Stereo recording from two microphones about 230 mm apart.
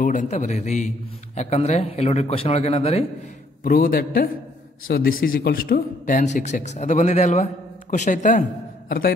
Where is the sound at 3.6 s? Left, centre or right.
Left.